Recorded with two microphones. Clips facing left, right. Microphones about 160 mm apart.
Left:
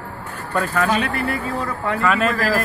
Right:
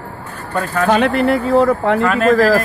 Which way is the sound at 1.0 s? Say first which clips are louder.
Right 9 dB; 75° right (ahead or behind).